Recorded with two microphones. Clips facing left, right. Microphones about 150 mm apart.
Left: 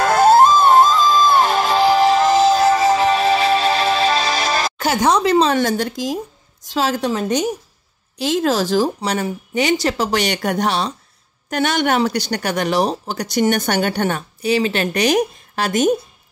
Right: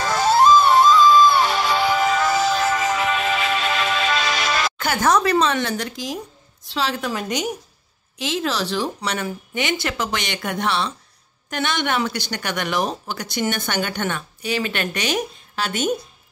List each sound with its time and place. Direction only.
0.0 s music: 55° left (ahead or behind); by 4.9 s 35° left (ahead or behind)
4.9 s speech: 20° left (ahead or behind)
5.5 s speech: 40° left (ahead or behind)
7.2 s speech: 10° right (ahead or behind)
8.2 s speech: 40° left (ahead or behind)